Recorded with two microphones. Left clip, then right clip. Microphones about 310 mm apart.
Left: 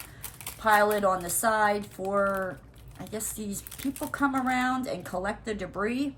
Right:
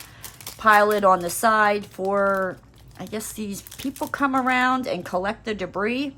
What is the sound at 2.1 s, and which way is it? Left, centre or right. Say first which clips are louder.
Speech: right 6 dB; centre.